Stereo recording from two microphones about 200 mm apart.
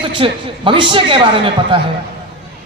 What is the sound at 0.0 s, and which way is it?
A woman's voice, 25° right (ahead or behind).